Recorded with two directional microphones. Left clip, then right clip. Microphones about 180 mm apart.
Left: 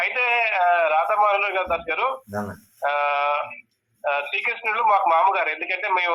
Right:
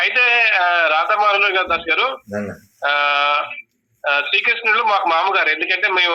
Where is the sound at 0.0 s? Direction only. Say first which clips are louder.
Right 7 dB; 25° right (ahead or behind).